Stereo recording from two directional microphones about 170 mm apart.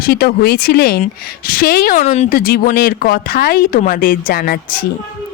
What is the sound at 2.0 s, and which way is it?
Speech, 40° left (ahead or behind).